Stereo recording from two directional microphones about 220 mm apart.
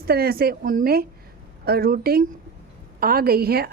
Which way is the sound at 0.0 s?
45° right (ahead or behind).